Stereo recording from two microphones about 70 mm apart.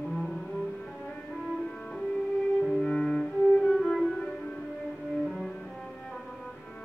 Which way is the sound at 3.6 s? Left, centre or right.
Centre.